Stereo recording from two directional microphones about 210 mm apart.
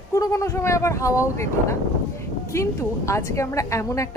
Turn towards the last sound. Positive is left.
turn(degrees=15)  # may be behind; listen again after turning